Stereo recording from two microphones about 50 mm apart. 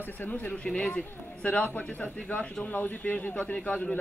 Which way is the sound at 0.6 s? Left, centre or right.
Centre.